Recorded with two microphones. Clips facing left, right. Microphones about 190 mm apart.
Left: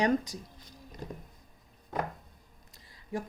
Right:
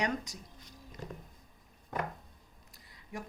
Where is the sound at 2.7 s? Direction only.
30° left (ahead or behind).